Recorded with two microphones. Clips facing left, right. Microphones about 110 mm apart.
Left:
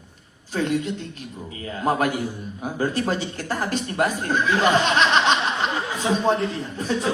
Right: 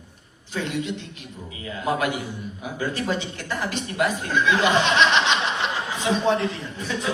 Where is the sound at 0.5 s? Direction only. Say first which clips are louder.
Left 4 dB; 40° left (ahead or behind).